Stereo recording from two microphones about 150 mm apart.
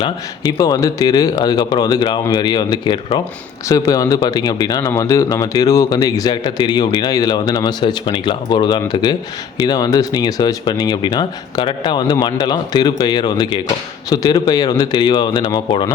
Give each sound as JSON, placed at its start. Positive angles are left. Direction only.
{"t": 0.0, "sound": "speech", "side_deg": 25}